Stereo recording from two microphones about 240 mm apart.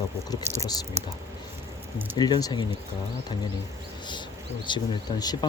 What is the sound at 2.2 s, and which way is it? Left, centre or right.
Speech, centre.